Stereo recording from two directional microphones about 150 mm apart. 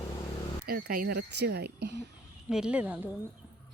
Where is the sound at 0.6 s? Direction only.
85° right.